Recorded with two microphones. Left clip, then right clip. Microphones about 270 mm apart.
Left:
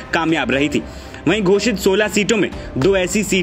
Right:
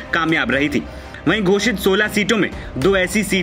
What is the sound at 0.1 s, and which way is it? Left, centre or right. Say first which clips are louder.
Speech: even; centre.